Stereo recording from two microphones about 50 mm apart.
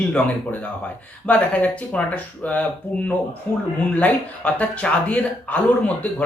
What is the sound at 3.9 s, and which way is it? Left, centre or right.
Speech, left.